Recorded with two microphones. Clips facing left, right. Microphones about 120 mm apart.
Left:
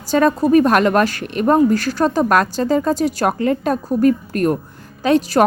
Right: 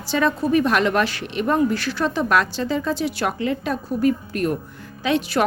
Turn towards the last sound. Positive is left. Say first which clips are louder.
# left 6 dB
turn(degrees=40)  # may be behind; listen again after turning